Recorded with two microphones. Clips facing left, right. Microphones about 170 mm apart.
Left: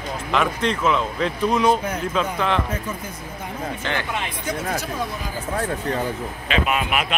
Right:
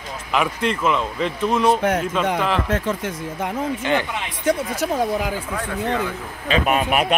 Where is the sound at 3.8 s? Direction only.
15° right (ahead or behind).